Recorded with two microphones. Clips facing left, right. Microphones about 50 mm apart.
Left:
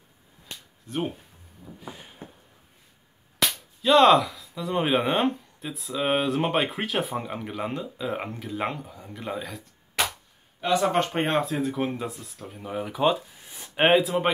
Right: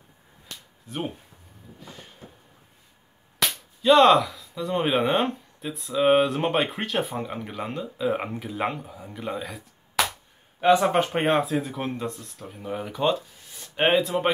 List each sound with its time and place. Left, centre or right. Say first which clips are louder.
0.9 s whip: left 2 dB; centre
1.8 s a sound: left 2 dB; centre
3.3 s whip: even; centre
10.8 s whip: right 1 dB; centre
13.5 s a sound: even; centre
13.8 s whip: left 1 dB; centre